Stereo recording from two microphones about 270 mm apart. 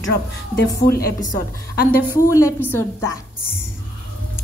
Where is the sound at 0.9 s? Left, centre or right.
Left.